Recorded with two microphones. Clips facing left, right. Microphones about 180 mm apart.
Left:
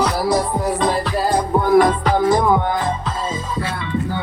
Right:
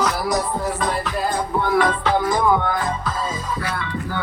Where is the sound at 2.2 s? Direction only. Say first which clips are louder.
Left 5 dB; 25° left (ahead or behind).